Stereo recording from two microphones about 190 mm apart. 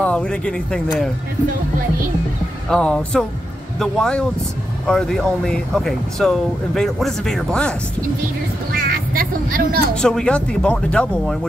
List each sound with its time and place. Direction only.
0.0 s speech: 5° left (ahead or behind)
2.7 s speech: 5° left (ahead or behind)
8.7 s music: 50° right (ahead or behind)
9.9 s speech: 5° left (ahead or behind)